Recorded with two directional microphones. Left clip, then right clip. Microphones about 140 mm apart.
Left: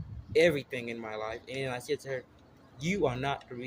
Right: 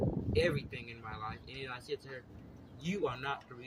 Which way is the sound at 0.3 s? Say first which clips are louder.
Left 8 dB; 35° right (ahead or behind).